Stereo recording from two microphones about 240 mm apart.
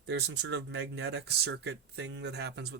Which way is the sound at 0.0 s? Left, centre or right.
Right.